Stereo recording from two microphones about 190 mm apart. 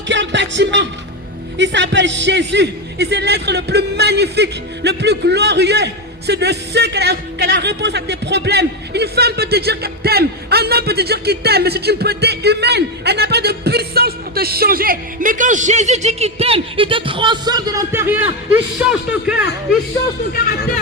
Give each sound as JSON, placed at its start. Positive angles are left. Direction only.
{"t": 0.1, "sound": "music", "side_deg": -70}
{"t": 1.5, "sound": "a man's voice", "side_deg": -70}